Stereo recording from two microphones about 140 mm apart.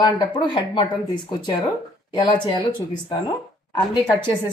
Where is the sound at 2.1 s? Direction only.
35° left (ahead or behind).